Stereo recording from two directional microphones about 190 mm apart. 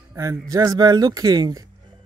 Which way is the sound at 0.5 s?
20° right (ahead or behind).